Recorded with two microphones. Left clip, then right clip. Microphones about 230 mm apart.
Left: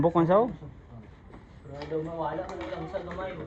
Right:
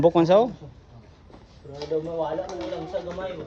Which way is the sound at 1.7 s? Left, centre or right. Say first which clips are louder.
Right 5 dB; right.